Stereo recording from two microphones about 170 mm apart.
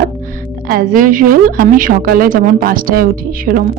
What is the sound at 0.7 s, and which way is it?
A woman's voice, 55° right (ahead or behind).